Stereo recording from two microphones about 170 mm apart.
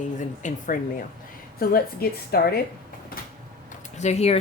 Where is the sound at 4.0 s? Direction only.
40° left (ahead or behind).